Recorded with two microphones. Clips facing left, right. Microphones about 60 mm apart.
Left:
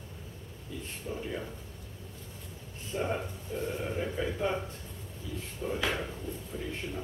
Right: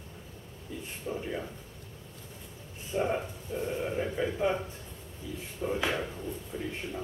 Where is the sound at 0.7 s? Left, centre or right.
Right.